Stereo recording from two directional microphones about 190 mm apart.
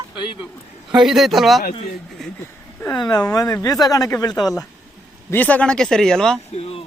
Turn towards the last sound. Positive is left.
turn(degrees=30)  # may be behind; listen again after turning